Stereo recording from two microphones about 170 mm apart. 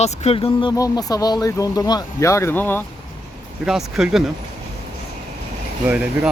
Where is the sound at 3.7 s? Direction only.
5° right (ahead or behind).